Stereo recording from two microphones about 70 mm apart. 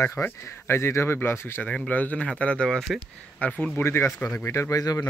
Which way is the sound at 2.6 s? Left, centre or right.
Centre.